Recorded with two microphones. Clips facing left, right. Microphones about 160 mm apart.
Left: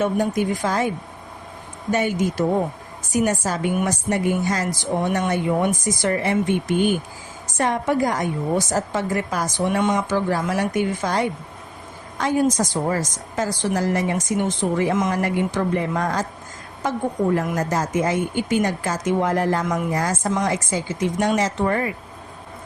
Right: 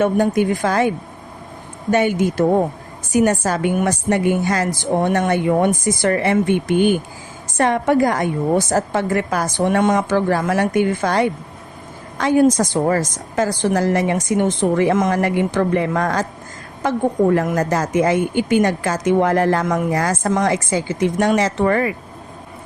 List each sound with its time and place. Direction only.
0.0 s a woman's voice: 65° right (ahead or behind)
1.9 s a woman's voice: 70° right (ahead or behind)
12.1 s a woman's voice: 80° right; by 15.1 s 60° right (ahead or behind)
15.1 s a woman's voice: 70° right (ahead or behind); by 21.9 s 90° right